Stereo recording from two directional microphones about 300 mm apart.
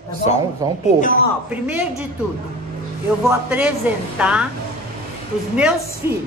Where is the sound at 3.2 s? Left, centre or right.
Centre.